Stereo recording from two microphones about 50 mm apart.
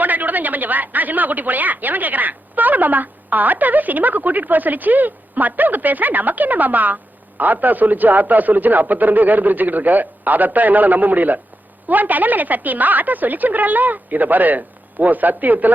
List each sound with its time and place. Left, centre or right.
0.0 s speech: right